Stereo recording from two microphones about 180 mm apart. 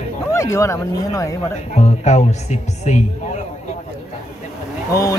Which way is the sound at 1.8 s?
40° left (ahead or behind).